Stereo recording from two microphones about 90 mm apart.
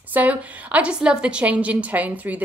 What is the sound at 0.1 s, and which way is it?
A woman's voice, 15° right (ahead or behind).